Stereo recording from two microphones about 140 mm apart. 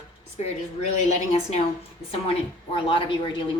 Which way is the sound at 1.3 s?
50° left (ahead or behind).